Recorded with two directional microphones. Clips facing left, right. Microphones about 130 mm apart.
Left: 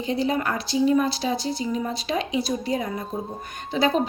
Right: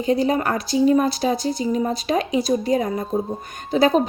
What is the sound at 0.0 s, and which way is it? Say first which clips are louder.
Speech: right 5 dB; 45° right (ahead or behind).